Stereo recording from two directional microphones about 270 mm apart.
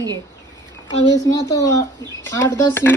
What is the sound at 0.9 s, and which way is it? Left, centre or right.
Speech, centre.